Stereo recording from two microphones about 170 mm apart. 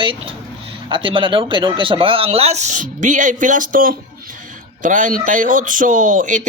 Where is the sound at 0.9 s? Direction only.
30° right (ahead or behind).